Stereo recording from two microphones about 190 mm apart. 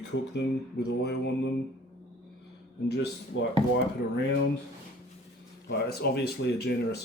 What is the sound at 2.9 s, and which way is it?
Speech, 60° left (ahead or behind).